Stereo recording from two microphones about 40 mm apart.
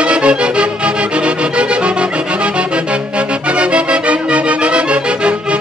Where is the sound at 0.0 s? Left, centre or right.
Right.